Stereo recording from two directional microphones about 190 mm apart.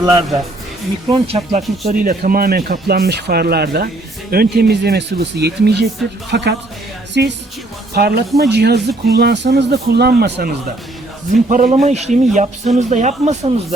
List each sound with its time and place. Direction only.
1.1 s a man's voice: 30° right (ahead or behind)
1.9 s speech: 50° right (ahead or behind); by 7.3 s 65° right (ahead or behind)
7.9 s speech: 55° right (ahead or behind)
11.3 s a man's voice: 40° right (ahead or behind)